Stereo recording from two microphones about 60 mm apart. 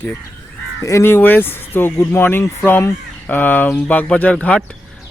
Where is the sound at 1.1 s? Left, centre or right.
Left.